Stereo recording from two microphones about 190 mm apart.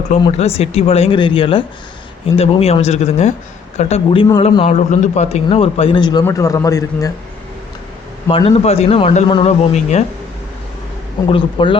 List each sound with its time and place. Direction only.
0.3 s a man's voice: 35° left (ahead or behind); by 7.1 s 15° left (ahead or behind)
8.3 s a man's voice: 30° left (ahead or behind)
11.3 s speech: 25° left (ahead or behind)